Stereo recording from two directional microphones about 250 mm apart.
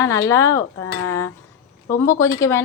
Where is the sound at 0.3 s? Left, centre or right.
Centre.